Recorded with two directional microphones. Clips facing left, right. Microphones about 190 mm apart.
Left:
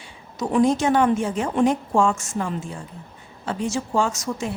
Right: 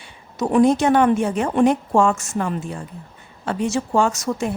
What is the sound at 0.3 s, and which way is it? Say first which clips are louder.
A woman's voice: right 3 dB; 60° right (ahead or behind).